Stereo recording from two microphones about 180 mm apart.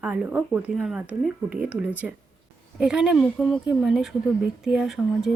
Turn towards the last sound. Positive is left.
turn(degrees=0)  # may be behind; listen again after turning